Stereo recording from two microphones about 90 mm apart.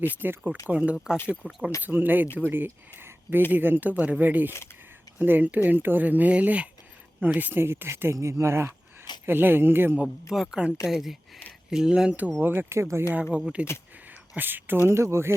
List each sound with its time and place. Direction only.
0.1 s speech: 20° right (ahead or behind)
1.1 s speech: 25° left (ahead or behind)
1.8 s speech: 20° right (ahead or behind)
10.0 s speech: 5° right (ahead or behind)
12.3 s speech: 25° right (ahead or behind)
13.4 s speech: 15° right (ahead or behind)
14.1 s a sound: 20° right (ahead or behind)
14.8 s speech: 30° right (ahead or behind)